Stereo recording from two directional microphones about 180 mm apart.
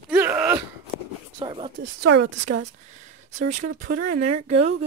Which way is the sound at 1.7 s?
80° right.